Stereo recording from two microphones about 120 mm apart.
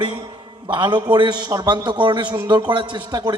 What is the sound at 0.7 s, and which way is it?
A man's voice, 40° right (ahead or behind).